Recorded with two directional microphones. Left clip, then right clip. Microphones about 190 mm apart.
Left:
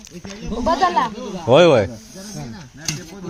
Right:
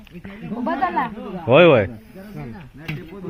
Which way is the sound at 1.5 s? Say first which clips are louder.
Even; 15° left (ahead or behind).